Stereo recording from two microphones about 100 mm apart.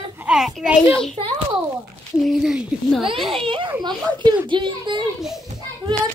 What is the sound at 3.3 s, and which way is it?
Speech, 65° right (ahead or behind).